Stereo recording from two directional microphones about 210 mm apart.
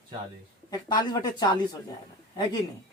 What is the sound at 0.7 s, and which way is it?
Speech, 20° left (ahead or behind).